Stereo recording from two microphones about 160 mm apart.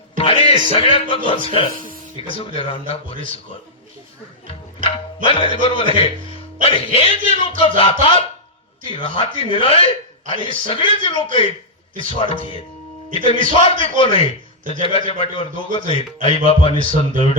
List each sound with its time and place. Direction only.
0.2 s music: 35° left (ahead or behind)
1.1 s a man's voice: 35° left (ahead or behind)
4.4 s a man's voice: 35° left (ahead or behind)